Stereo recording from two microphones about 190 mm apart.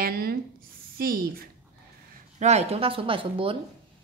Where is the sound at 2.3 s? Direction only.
35° right (ahead or behind).